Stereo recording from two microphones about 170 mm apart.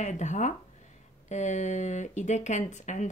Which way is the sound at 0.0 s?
45° left (ahead or behind).